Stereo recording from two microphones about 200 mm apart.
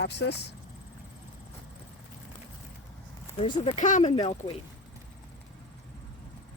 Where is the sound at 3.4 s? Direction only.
35° left (ahead or behind).